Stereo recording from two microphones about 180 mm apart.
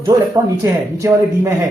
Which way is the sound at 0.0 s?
20° right (ahead or behind).